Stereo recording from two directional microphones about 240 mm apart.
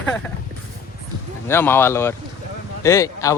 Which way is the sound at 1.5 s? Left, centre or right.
Centre.